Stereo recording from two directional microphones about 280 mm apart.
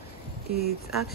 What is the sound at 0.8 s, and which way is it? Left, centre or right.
Speech, centre.